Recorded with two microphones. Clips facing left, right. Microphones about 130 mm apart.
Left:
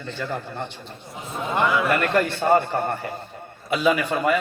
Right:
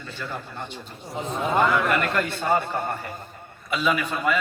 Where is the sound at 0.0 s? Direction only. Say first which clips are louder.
Left 5 dB; 55° left (ahead or behind).